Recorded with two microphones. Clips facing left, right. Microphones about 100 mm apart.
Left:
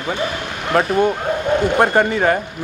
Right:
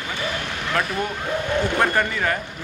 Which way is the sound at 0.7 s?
30° left (ahead or behind).